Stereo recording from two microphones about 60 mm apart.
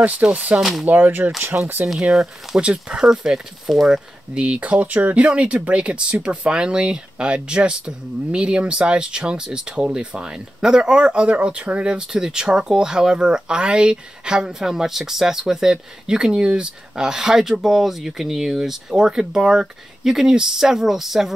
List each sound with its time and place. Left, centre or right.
0.0 s speech: right
0.6 s speech: centre
0.8 s speech: right
1.9 s speech: centre
4.4 s speech: right; by 21.3 s centre